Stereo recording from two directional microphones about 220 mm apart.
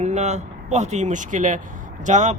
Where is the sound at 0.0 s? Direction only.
30° right (ahead or behind).